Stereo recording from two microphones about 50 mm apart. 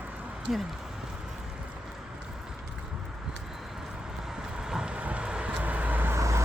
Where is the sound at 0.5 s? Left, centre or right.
Centre.